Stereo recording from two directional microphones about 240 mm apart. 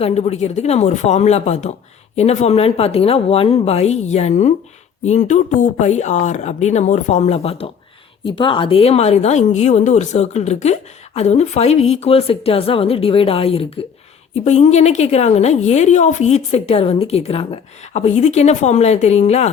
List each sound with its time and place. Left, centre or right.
0.0 s speech: left